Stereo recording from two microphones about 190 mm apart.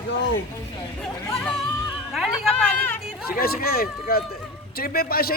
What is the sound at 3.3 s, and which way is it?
A man's voice, 50° left (ahead or behind).